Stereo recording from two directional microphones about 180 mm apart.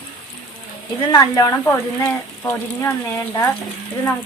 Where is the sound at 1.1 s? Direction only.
20° left (ahead or behind).